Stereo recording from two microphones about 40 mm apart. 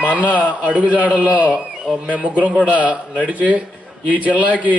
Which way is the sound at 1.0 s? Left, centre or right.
Right.